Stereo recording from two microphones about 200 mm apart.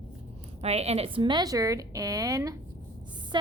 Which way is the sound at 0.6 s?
30° right (ahead or behind).